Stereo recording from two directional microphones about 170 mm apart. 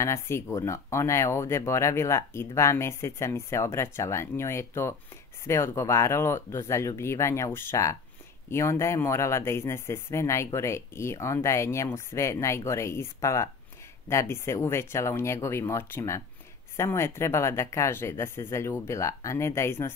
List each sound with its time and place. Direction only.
0.0 s speech: 15° left (ahead or behind)